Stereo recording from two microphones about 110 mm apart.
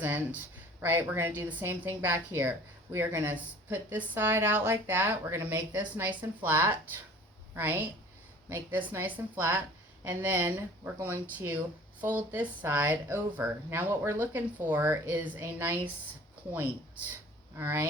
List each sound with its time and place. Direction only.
0.0 s a woman's voice: 20° right (ahead or behind)
17.6 s speech: 20° right (ahead or behind)